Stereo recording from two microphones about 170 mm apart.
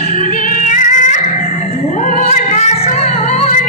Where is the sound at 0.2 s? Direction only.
45° left (ahead or behind).